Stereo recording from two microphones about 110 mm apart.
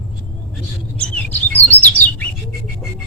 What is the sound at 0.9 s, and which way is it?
Chirp, 15° left (ahead or behind).